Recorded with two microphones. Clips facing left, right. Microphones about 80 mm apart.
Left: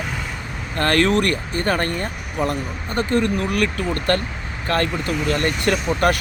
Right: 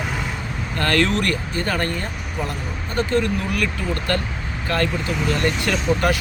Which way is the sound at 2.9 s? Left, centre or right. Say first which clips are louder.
Left 1 dB; right.